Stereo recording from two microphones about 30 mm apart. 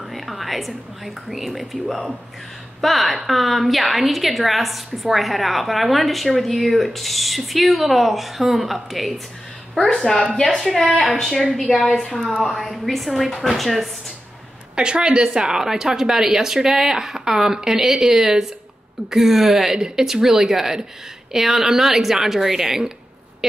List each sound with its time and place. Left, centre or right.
0.1 s a woman's voice: centre
9.9 s a woman's voice: centre
12.2 s a woman's voice: right
12.7 s a woman's voice: centre
14.8 s a woman's voice: right
17.7 s speech: centre
18.1 s speech: centre